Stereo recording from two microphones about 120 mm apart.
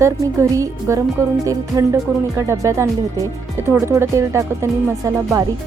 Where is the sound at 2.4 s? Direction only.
25° right (ahead or behind).